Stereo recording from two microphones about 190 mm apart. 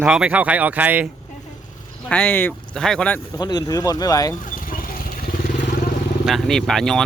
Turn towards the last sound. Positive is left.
turn(degrees=0)  # may be behind; listen again after turning